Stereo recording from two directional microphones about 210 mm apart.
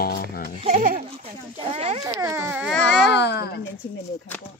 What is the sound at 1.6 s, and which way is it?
Speech, 30° right (ahead or behind).